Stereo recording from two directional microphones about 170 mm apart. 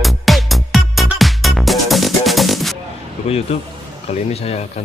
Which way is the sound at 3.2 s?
40° left (ahead or behind).